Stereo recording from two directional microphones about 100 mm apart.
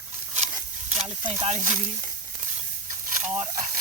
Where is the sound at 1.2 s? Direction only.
50° right (ahead or behind).